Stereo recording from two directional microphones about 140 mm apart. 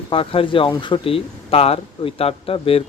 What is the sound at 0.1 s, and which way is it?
Speech, 40° left (ahead or behind).